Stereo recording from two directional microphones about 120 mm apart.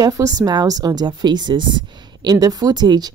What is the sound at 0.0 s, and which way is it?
Speech, 30° right (ahead or behind).